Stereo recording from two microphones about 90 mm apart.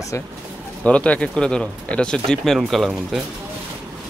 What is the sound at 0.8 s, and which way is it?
Speech, 15° left (ahead or behind).